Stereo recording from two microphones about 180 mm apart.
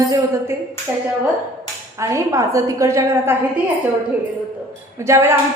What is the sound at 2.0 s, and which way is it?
A woman's voice, 15° right (ahead or behind).